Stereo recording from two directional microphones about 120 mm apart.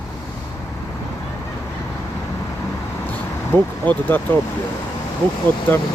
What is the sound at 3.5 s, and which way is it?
Speech, 15° left (ahead or behind).